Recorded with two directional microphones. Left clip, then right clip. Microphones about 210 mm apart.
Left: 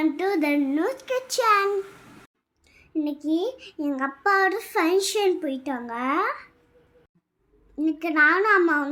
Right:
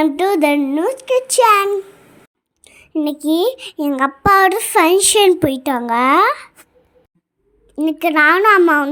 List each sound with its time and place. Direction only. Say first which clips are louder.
0.0 s a child's voice: right 9 dB; 30° right (ahead or behind)
7.8 s a child's voice: right 7 dB; 40° right (ahead or behind)